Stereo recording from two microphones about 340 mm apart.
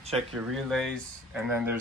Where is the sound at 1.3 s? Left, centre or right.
Centre.